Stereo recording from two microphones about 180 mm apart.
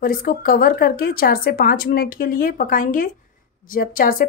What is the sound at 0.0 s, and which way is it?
Speech, 55° left (ahead or behind).